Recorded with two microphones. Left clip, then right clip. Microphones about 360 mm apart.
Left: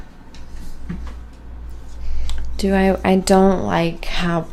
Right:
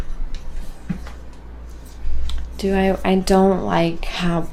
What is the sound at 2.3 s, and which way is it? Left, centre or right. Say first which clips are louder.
Speech: left 1 dB; left.